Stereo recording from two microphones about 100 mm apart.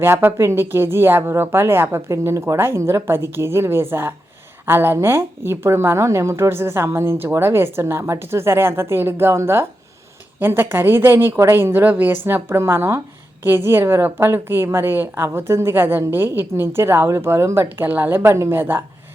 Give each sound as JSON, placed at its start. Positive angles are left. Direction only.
{"t": 0.0, "sound": "a woman's voice", "side_deg": -20}